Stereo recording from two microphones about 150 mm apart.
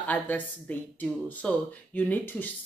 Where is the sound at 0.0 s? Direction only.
10° left (ahead or behind).